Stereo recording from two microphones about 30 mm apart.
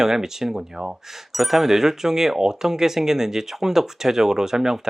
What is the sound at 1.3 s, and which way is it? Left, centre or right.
Speech, centre.